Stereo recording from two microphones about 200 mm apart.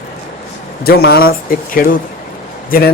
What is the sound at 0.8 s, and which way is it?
A man's voice, 50° left (ahead or behind).